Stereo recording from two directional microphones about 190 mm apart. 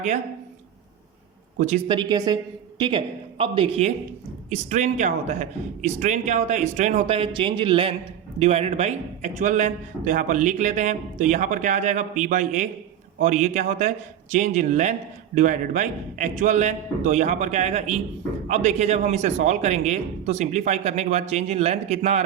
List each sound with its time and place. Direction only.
1.5 s a man's voice: 35° right (ahead or behind)
2.0 s a woman's voice: 20° right (ahead or behind)